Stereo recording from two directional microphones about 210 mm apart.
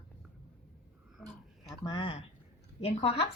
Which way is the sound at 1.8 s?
25° left (ahead or behind).